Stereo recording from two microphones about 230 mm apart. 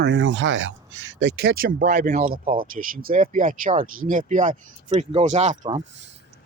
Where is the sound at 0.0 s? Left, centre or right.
Right.